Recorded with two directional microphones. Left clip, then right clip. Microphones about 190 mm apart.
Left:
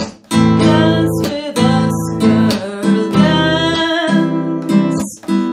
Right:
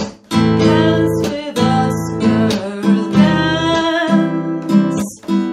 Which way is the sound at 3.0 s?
10° left (ahead or behind).